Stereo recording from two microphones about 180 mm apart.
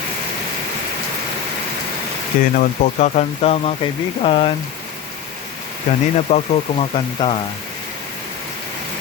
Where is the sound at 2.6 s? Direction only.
40° left (ahead or behind).